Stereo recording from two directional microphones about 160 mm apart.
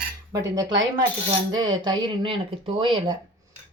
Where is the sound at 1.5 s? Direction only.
30° right (ahead or behind).